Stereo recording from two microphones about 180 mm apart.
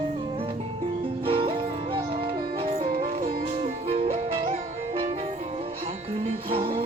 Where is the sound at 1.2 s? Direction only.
30° right (ahead or behind).